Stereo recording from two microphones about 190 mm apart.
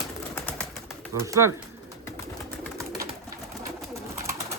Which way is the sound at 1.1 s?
15° right (ahead or behind).